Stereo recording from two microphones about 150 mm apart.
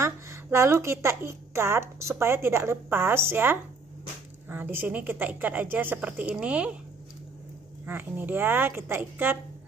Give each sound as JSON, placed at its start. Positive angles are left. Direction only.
{"t": 0.0, "sound": "a woman's voice", "side_deg": -20}
{"t": 7.8, "sound": "a woman's voice", "side_deg": -10}